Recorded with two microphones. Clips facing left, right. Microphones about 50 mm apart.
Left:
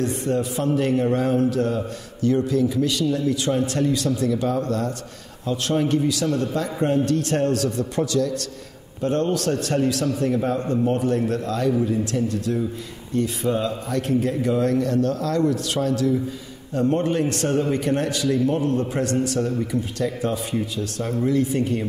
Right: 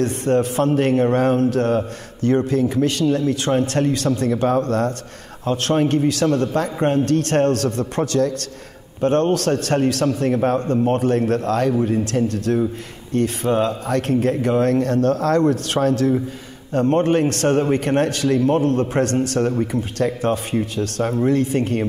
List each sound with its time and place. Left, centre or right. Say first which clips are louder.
0.0 s a man's voice: right 5 dB; right